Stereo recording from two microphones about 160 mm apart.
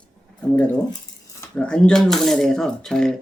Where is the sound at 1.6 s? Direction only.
5° left (ahead or behind).